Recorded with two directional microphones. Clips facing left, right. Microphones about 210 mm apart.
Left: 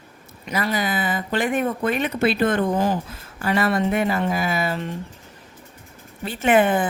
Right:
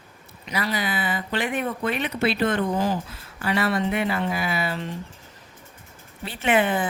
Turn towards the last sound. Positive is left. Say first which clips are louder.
# left 4 dB
turn(degrees=50)  # may be behind; listen again after turning